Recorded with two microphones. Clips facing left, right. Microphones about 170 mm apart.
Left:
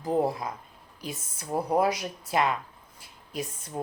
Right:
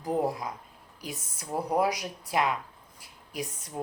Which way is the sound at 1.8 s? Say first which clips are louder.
Left 2 dB; 15° right (ahead or behind).